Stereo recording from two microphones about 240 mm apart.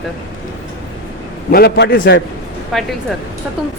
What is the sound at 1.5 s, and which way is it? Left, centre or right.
Speech, left.